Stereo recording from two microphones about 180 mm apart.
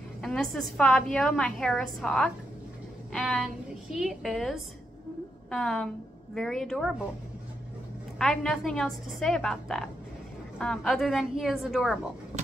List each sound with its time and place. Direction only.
0.2 s a woman's voice: 5° left (ahead or behind)
8.2 s a woman's voice: centre (ahead or behind)